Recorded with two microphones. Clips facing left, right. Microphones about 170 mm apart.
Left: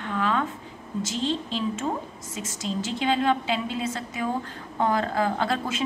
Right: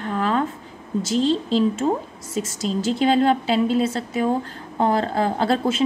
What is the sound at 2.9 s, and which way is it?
A woman's voice, 35° right (ahead or behind).